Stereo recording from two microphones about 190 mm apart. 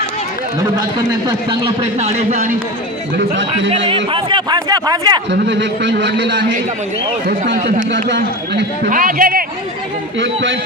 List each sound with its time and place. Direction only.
1.5 s a man's voice: 30° right (ahead or behind)
3.8 s speech: 30° right (ahead or behind)
5.3 s a man's voice: 65° right (ahead or behind)
7.5 s a man's voice: 40° right (ahead or behind)
8.9 s speech: 45° right (ahead or behind)
10.2 s a man's voice: 75° right (ahead or behind)